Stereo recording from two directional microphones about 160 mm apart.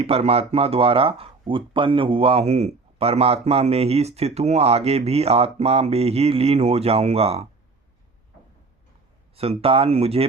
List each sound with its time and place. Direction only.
0.0 s speech: 40° right (ahead or behind)
9.3 s speech: 40° right (ahead or behind)